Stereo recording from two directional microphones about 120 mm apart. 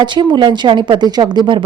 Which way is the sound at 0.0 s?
40° right (ahead or behind).